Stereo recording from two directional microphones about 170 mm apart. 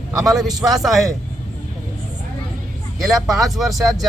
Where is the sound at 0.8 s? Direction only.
Centre (ahead or behind).